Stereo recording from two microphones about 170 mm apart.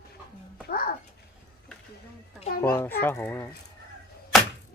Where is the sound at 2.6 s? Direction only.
10° left (ahead or behind).